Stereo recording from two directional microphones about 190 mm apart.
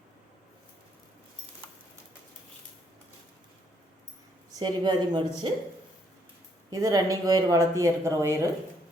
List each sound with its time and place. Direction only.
4.5 s a woman's voice: 20° right (ahead or behind)
6.7 s speech: 15° right (ahead or behind)